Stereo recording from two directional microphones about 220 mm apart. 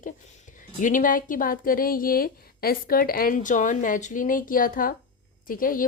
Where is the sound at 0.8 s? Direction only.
35° left (ahead or behind).